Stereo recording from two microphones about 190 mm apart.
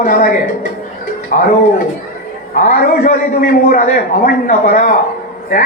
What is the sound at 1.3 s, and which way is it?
Speech, 45° left (ahead or behind).